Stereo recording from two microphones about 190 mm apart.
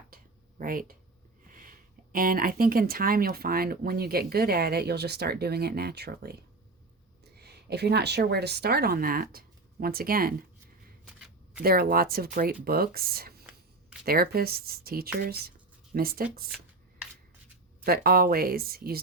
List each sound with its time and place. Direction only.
0.6 s speech: 45° right (ahead or behind)
7.3 s a woman's voice: 60° right (ahead or behind)
11.0 s shuffling cards: 5° right (ahead or behind)
11.6 s speech: 50° right (ahead or behind)
17.8 s speech: 50° right (ahead or behind)